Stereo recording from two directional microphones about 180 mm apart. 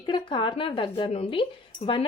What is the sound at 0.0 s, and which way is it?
Speech, 25° left (ahead or behind).